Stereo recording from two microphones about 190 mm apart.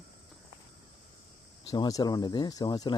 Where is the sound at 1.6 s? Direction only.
20° left (ahead or behind).